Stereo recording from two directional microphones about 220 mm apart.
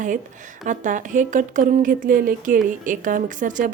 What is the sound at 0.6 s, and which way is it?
Speech, 35° right (ahead or behind).